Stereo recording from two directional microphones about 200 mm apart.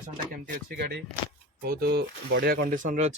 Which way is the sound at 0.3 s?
45° right (ahead or behind).